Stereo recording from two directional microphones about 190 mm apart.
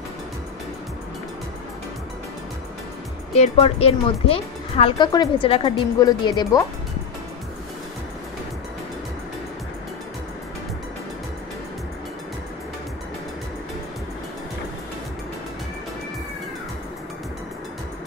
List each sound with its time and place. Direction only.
3.3 s speech: 30° left (ahead or behind)